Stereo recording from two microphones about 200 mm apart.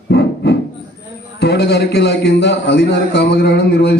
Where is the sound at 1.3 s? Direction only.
55° left (ahead or behind).